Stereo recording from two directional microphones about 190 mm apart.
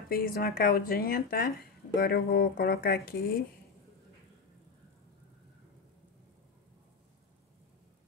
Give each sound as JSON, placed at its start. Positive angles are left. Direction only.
{"t": 0.1, "sound": "speech", "side_deg": 50}